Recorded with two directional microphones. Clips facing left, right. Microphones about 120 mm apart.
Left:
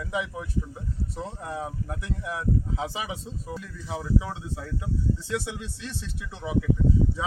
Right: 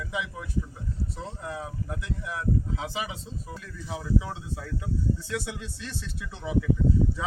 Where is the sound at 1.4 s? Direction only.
25° left (ahead or behind).